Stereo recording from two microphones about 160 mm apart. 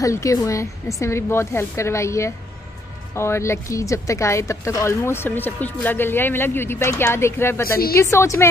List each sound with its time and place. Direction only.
0.0 s speech: 20° left (ahead or behind)